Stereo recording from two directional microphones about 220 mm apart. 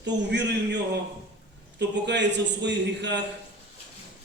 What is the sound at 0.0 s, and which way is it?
Speech, 50° right (ahead or behind).